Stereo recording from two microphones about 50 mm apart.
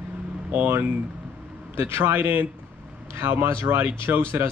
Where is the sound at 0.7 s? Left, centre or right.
Right.